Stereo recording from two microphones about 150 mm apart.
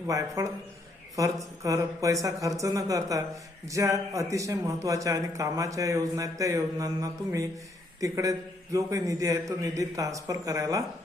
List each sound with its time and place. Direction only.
0.1 s a man's voice: 20° right (ahead or behind)